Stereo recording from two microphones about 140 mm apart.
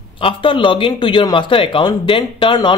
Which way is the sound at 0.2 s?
40° left (ahead or behind).